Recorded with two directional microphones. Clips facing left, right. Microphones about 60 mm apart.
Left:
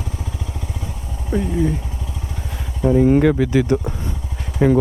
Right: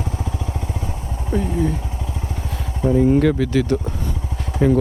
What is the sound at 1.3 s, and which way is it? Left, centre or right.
Vehicle, centre.